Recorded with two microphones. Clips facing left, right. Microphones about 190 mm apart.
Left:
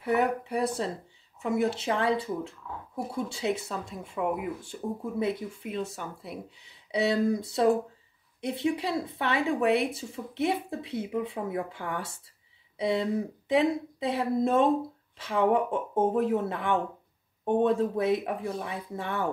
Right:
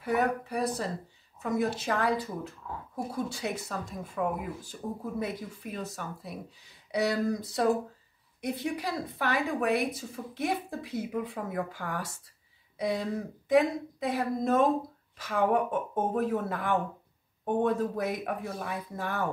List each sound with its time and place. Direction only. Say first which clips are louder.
0.0 s speech: left 2 dB; 25° left (ahead or behind)